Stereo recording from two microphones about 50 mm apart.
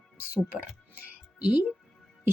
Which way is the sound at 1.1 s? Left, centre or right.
Right.